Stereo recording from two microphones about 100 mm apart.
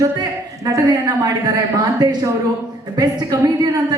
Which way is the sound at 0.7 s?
35° right (ahead or behind).